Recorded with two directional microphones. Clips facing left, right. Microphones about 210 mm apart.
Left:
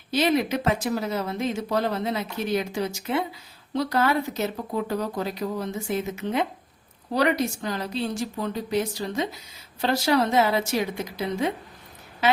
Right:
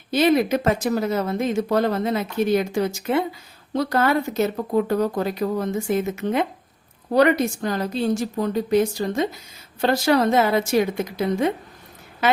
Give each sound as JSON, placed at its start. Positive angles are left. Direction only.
{"t": 0.1, "sound": "speech", "side_deg": -50}